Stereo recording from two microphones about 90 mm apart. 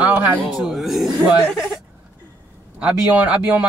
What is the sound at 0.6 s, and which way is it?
Speech, centre (ahead or behind).